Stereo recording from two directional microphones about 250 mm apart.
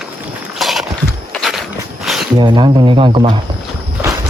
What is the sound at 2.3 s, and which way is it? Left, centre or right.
Speech, centre.